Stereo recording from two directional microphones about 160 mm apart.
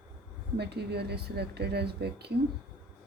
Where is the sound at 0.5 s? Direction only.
90° right.